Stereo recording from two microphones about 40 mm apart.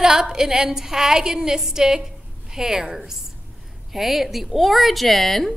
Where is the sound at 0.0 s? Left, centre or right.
Centre.